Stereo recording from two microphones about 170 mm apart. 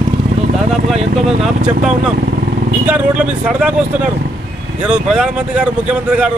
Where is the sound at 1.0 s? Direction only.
40° right (ahead or behind).